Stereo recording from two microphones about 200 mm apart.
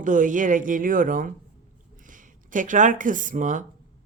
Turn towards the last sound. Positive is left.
turn(degrees=-40)  # may be behind; listen again after turning